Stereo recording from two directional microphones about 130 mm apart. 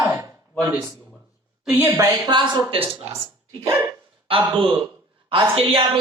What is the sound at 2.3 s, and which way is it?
Speech, 40° right (ahead or behind).